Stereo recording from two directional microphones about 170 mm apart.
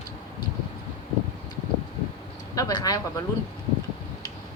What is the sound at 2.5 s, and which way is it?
Vehicle, 20° left (ahead or behind).